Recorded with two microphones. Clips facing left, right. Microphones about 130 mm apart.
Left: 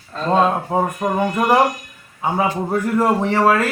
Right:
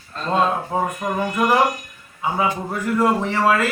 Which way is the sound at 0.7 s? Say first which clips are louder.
Left 3 dB; 25° left (ahead or behind).